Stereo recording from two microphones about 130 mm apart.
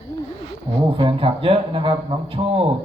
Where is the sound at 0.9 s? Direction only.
45° right (ahead or behind).